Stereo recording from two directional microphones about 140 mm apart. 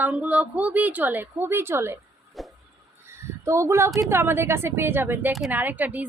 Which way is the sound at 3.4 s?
20° right (ahead or behind).